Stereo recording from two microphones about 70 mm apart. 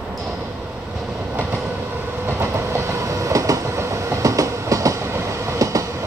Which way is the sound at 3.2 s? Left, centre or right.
Right.